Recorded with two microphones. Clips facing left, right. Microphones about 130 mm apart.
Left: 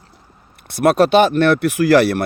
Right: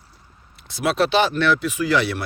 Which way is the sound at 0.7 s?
60° left (ahead or behind).